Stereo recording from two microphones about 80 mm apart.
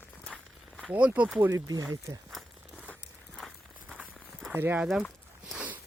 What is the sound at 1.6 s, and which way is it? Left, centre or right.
Speech, right.